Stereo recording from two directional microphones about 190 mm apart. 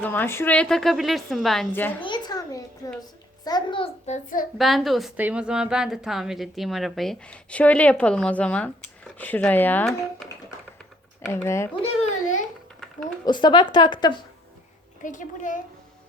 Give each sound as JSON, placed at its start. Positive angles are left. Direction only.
{"t": 0.0, "sound": "a woman's voice", "side_deg": 10}
{"t": 2.0, "sound": "a sound", "side_deg": 20}
{"t": 3.4, "sound": "a woman's voice", "side_deg": 25}
{"t": 4.0, "sound": "child singing", "side_deg": 40}
{"t": 4.5, "sound": "a woman's voice", "side_deg": 0}
{"t": 11.3, "sound": "speech", "side_deg": 15}
{"t": 13.2, "sound": "a woman's voice", "side_deg": 25}
{"t": 15.0, "sound": "a child's voice", "side_deg": 40}